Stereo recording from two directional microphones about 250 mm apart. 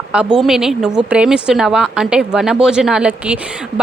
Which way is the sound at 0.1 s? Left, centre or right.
Centre.